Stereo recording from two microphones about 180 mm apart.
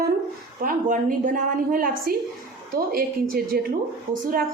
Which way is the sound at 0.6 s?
45° right (ahead or behind).